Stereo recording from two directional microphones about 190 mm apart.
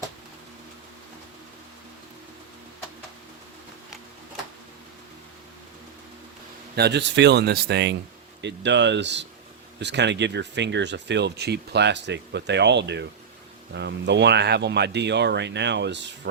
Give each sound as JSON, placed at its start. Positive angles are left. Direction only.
{"t": 6.7, "sound": "speech", "side_deg": -60}